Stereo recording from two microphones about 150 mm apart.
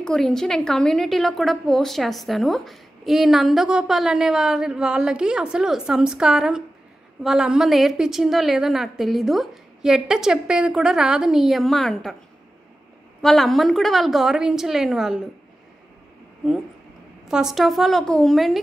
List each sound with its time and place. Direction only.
0.0 s a woman's voice: 5° left (ahead or behind)
13.2 s a woman's voice: centre (ahead or behind)
17.3 s a woman's voice: 5° right (ahead or behind)